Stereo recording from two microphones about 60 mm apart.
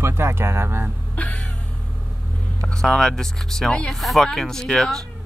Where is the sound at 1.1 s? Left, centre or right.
Left.